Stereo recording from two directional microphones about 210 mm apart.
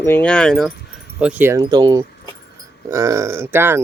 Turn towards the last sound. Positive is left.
turn(degrees=-10)  # may be behind; listen again after turning